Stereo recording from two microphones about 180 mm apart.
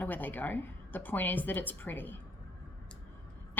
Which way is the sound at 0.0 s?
10° left (ahead or behind).